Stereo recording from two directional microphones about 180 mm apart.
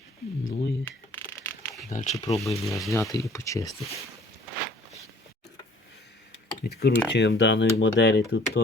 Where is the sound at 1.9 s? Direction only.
45° left (ahead or behind).